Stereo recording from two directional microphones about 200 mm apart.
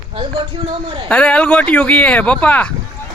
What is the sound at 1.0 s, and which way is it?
Speech, 5° left (ahead or behind).